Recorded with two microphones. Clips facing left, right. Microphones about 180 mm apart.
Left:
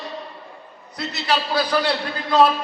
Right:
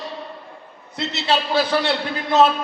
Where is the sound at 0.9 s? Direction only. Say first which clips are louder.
Right 2 dB; 25° right (ahead or behind).